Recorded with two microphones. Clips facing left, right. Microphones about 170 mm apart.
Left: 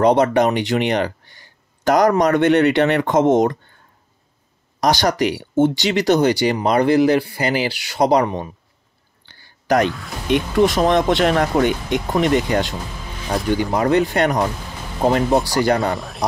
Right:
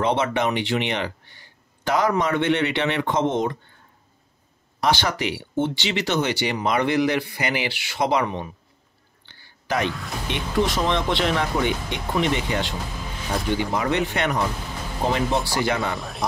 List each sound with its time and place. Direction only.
0.0 s speech: 40° left (ahead or behind)
4.7 s speech: 40° left (ahead or behind)
9.2 s a sound: 45° left (ahead or behind)
9.8 s speech: centre (ahead or behind)
10.3 s speech: 45° left (ahead or behind)
15.9 s speech: centre (ahead or behind)